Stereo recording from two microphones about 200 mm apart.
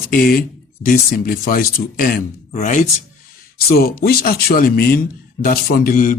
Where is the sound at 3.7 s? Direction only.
50° left (ahead or behind).